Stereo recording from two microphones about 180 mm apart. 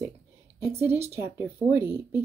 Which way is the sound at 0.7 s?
15° right (ahead or behind).